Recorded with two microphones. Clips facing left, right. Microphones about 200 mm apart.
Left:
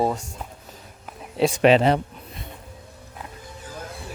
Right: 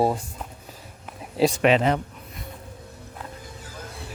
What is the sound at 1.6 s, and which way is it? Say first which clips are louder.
Speech: left 6 dB; 30° left (ahead or behind).